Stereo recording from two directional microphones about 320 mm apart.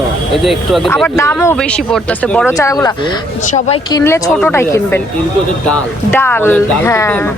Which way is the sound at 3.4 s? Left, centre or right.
Left.